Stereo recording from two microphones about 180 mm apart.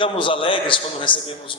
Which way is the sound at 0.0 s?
30° left (ahead or behind).